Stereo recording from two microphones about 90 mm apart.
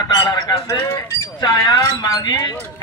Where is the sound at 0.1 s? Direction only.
45° left (ahead or behind).